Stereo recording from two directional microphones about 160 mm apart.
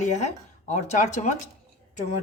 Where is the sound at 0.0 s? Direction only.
50° left (ahead or behind).